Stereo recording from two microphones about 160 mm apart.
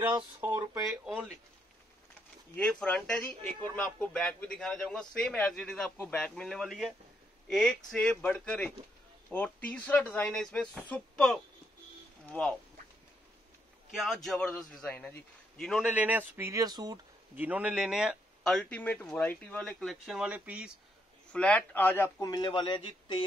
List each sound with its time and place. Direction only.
0.8 s speech: centre (ahead or behind)
2.5 s speech: 5° left (ahead or behind)
13.9 s speech: centre (ahead or behind)
15.9 s speech: 10° right (ahead or behind)
17.4 s speech: 10° right (ahead or behind)
21.3 s speech: 5° left (ahead or behind)
22.3 s a man's voice: 30° left (ahead or behind)